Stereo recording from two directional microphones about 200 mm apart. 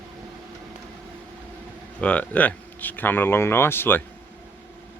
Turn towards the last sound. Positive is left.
turn(degrees=10)  # may be behind; listen again after turning